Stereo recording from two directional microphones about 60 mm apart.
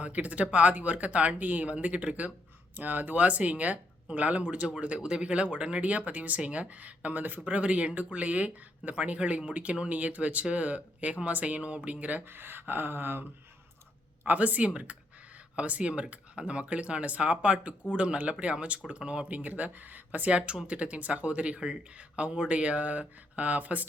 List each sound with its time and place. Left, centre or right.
0.0 s speech: right
14.3 s speech: right